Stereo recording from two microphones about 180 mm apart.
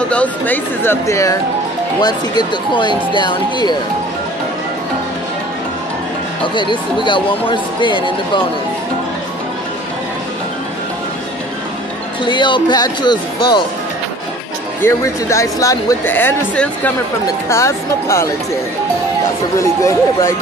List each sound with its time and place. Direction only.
0.1 s speech: 10° left (ahead or behind); by 3.7 s 25° left (ahead or behind)
6.4 s speech: 25° left (ahead or behind)
12.3 s speech: 25° left (ahead or behind)
14.8 s speech: 15° left (ahead or behind)
19.6 s speech: 15° left (ahead or behind)